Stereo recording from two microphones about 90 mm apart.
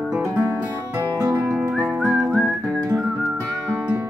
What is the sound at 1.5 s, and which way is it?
Music, 5° right (ahead or behind).